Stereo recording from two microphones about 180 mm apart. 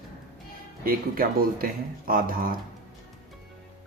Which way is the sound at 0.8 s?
55° right (ahead or behind).